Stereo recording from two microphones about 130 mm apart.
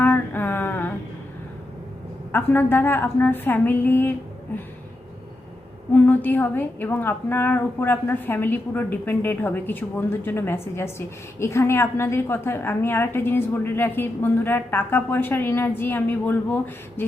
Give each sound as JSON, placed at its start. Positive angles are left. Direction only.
{"t": 0.0, "sound": "a sound", "side_deg": 15}
{"t": 2.3, "sound": "a woman's voice", "side_deg": 15}
{"t": 5.9, "sound": "a woman's voice", "side_deg": 15}